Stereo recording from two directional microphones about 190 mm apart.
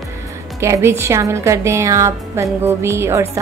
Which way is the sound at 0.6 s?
15° right (ahead or behind).